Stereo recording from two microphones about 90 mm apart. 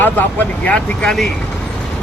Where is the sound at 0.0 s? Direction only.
20° left (ahead or behind).